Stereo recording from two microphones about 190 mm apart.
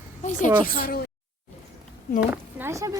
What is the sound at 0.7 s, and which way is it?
Speech, 50° left (ahead or behind).